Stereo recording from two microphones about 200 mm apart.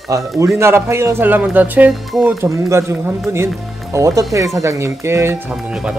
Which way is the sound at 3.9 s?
15° right (ahead or behind).